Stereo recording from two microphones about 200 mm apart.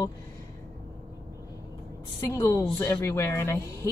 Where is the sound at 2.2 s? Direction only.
15° left (ahead or behind).